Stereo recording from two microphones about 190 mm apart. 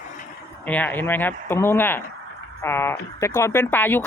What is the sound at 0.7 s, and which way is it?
Speech, 10° left (ahead or behind).